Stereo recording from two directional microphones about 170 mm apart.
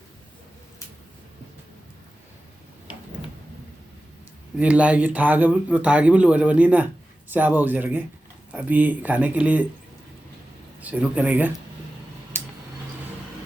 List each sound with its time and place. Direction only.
4.5 s a man's voice: 10° right (ahead or behind)
10.8 s a man's voice: 10° right (ahead or behind)